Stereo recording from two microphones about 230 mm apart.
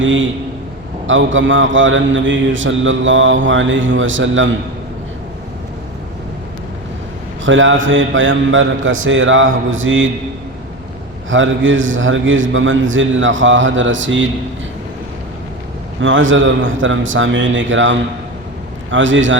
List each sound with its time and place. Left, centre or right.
0.0 s a man's voice: right
7.4 s a man's voice: right
11.3 s a man's voice: right
16.0 s a man's voice: right